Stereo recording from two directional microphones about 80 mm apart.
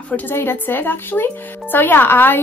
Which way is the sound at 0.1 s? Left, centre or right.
Left.